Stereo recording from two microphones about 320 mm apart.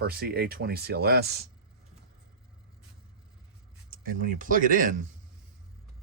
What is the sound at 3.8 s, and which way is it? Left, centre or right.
Speech, right.